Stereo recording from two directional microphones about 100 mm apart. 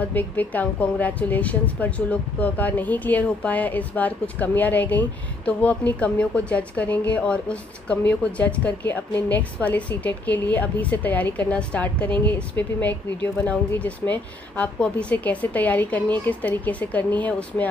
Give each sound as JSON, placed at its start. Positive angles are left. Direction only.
{"t": 0.1, "sound": "a woman's voice", "side_deg": 15}